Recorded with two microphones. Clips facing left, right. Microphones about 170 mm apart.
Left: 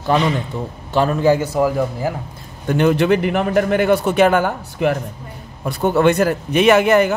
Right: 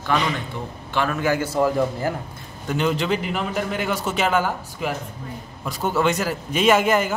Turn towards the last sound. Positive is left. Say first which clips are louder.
# left 5 dB
turn(degrees=65)  # may be behind; listen again after turning